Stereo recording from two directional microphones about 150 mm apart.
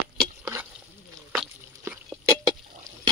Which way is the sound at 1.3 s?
10° right (ahead or behind).